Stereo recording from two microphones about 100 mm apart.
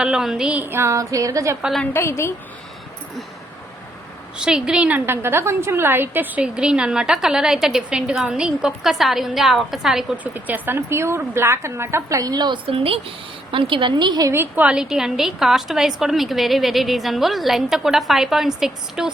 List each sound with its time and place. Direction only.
0.0 s a woman's voice: 5° right (ahead or behind)
0.6 s a sound: 25° right (ahead or behind)
1.9 s a woman's voice: 25° left (ahead or behind)
4.4 s a woman's voice: 5° right (ahead or behind)
10.3 s a woman's voice: 20° right (ahead or behind); by 12.5 s 45° right (ahead or behind)
12.6 s speech: 70° right (ahead or behind)
13.5 s a woman's voice: 60° right (ahead or behind)
14.3 s a woman's voice: 20° right (ahead or behind); by 19.1 s 5° right (ahead or behind)